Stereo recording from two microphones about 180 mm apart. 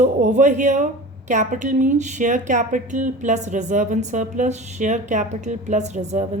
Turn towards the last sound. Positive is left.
turn(degrees=-40)  # may be behind; listen again after turning